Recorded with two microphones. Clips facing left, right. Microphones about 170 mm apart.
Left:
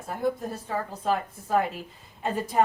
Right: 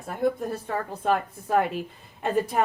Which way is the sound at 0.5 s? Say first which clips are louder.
Right 2 dB; 60° right (ahead or behind).